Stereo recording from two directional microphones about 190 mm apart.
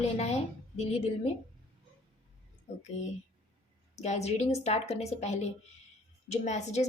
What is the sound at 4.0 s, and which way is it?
A woman's voice, 35° left (ahead or behind).